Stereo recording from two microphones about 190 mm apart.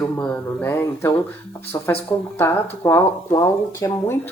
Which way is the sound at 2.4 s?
15° left (ahead or behind).